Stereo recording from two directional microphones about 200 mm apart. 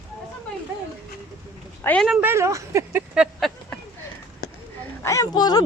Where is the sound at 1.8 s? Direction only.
Centre (ahead or behind).